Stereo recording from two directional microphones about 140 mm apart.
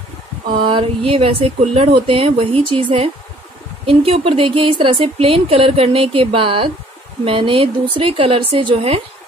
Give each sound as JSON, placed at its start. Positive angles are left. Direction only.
{"t": 0.7, "sound": "speech", "side_deg": -40}